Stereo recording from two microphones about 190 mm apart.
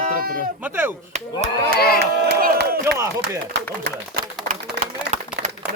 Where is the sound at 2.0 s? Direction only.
60° right (ahead or behind).